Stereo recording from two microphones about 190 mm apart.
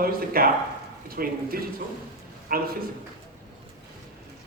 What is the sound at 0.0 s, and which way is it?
A man's voice, 50° right (ahead or behind).